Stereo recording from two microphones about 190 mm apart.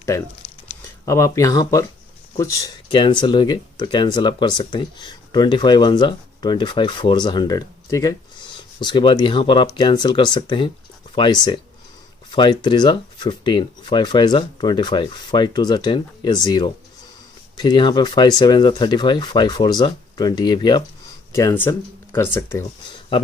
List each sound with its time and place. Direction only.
1.0 s speech: 15° left (ahead or behind)